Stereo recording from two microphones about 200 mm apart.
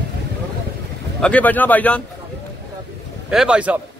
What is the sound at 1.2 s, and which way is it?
Speech, 5° left (ahead or behind).